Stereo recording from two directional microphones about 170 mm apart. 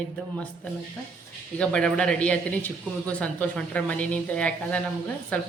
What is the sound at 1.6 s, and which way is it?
A man's voice, 5° left (ahead or behind).